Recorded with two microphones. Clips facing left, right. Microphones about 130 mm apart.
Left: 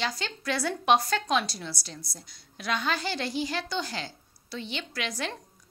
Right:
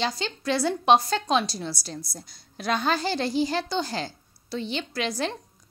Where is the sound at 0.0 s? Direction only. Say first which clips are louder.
Right 4 dB; 25° right (ahead or behind).